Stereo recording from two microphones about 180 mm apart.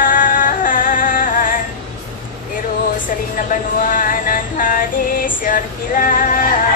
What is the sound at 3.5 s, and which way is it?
Vehicle, 50° left (ahead or behind).